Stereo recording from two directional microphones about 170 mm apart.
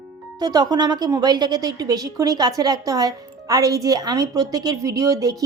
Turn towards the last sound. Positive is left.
turn(degrees=-20)  # may be behind; listen again after turning